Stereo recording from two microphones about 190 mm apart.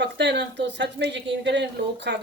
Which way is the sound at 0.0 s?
70° right (ahead or behind).